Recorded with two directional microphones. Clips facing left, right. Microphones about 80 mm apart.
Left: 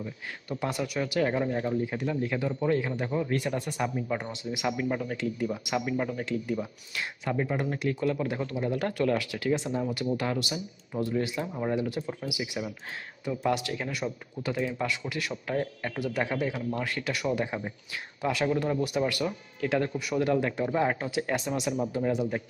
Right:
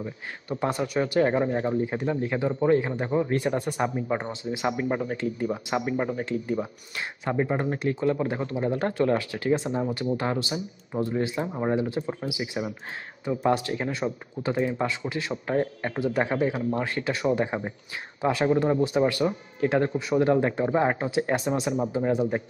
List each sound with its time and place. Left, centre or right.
0.0 s speech: right